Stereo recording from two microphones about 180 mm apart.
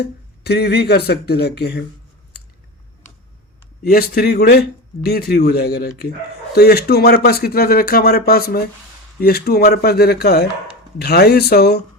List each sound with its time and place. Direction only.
0.0 s speech: 65° left (ahead or behind)
3.8 s speech: 60° left (ahead or behind)